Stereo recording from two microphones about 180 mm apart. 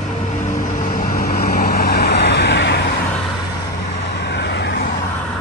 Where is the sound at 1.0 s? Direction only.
55° left (ahead or behind).